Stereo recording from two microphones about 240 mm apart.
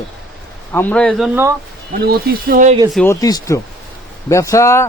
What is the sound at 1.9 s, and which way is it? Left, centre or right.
Speech, right.